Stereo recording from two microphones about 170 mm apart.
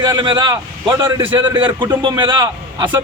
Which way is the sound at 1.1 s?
15° right (ahead or behind).